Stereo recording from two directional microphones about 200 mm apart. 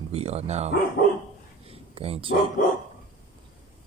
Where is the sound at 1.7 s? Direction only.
30° right (ahead or behind).